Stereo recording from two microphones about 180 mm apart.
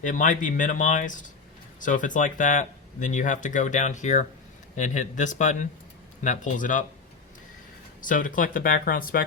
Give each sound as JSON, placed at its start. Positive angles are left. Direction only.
{"t": 0.0, "sound": "speech", "side_deg": 45}
{"t": 8.0, "sound": "speech", "side_deg": 45}